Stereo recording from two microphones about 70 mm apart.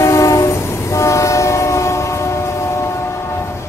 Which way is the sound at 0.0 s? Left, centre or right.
Left.